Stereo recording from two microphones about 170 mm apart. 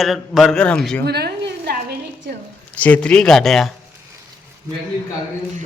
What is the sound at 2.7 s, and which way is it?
Speech, 10° left (ahead or behind).